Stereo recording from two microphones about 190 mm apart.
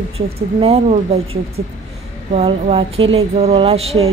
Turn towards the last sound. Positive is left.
turn(degrees=-30)  # may be behind; listen again after turning